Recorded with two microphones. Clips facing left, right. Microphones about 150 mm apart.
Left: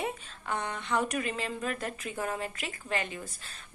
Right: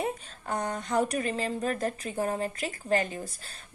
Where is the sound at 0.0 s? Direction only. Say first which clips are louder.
Right 3 dB; 40° right (ahead or behind).